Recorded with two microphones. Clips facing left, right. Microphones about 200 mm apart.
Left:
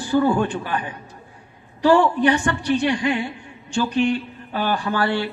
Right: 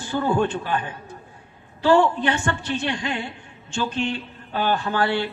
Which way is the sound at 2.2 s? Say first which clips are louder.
Left 5 dB; 15° left (ahead or behind).